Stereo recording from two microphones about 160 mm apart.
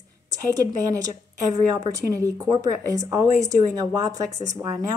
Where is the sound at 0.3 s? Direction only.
20° right (ahead or behind).